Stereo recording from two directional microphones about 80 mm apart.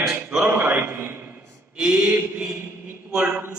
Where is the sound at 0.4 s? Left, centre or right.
Right.